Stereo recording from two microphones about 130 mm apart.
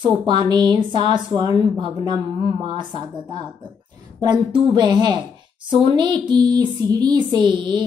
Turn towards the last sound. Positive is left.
turn(degrees=-35)  # may be behind; listen again after turning